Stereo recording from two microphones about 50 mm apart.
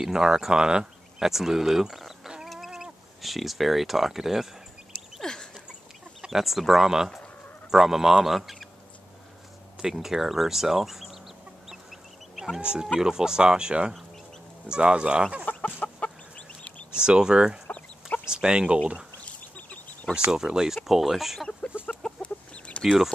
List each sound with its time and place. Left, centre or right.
0.0 s speech: centre
1.2 s speech: centre
5.2 s a sound: centre
6.2 s speech: centre
9.8 s speech: centre
12.5 s speech: centre
15.4 s chicken: left
16.9 s speech: centre
19.2 s duck: left
20.2 s speech: centre
22.0 s chicken: left